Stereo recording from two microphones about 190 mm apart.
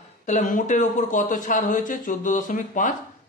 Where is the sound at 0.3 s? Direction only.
40° left (ahead or behind).